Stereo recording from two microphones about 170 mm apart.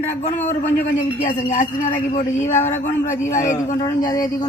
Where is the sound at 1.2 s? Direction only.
45° left (ahead or behind).